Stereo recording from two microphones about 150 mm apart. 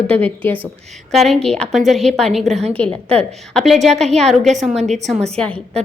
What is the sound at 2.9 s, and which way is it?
Speech, 40° right (ahead or behind).